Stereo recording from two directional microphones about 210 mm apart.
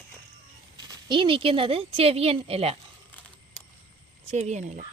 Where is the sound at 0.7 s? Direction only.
20° right (ahead or behind).